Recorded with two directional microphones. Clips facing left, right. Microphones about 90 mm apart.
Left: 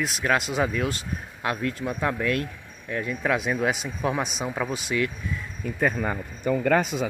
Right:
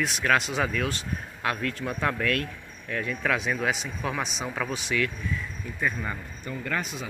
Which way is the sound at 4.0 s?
30° left (ahead or behind).